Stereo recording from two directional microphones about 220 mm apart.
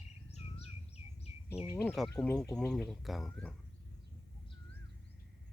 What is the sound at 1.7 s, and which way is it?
Speech, 5° left (ahead or behind).